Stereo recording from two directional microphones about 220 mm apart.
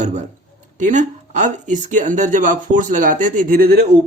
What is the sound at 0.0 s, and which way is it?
Speech, 35° right (ahead or behind).